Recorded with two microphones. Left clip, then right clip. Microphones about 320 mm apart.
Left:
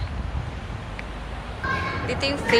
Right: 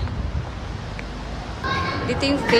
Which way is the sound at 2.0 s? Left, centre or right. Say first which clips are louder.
Right 3 dB; centre.